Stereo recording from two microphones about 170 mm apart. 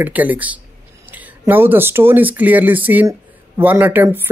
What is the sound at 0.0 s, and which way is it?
Speech, 10° right (ahead or behind).